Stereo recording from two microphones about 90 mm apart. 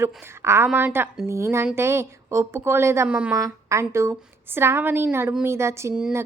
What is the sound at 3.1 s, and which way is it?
Speech, 15° right (ahead or behind).